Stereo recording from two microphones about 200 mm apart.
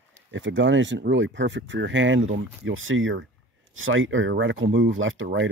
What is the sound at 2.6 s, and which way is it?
Speech, 80° right.